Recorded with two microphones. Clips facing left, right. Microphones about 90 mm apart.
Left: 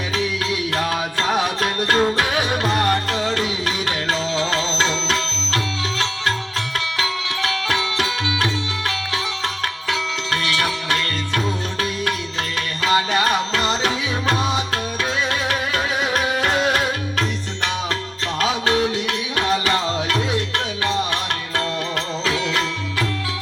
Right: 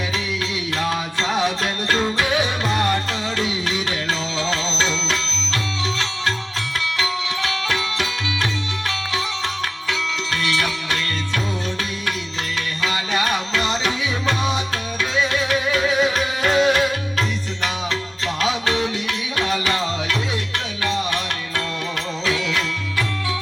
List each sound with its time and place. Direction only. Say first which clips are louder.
0.8 s music: right 2 dB; 50° left (ahead or behind)
7.0 s music: even; 50° left (ahead or behind)
12.8 s music: left 5 dB; 45° left (ahead or behind)
18.3 s music: left 3 dB; 45° left (ahead or behind)
22.3 s music: even; 35° left (ahead or behind)